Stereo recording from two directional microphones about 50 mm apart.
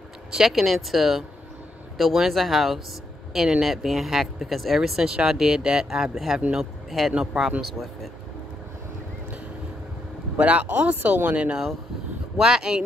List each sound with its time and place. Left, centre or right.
0.3 s speech: centre
7.6 s speech: centre
10.3 s speech: right
12.4 s speech: centre